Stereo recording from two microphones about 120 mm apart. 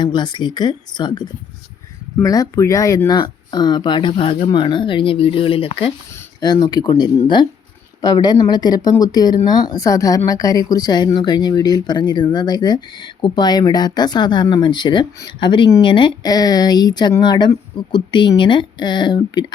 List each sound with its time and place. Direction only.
0.0 s speech: 35° left (ahead or behind)
6.4 s speech: 35° left (ahead or behind)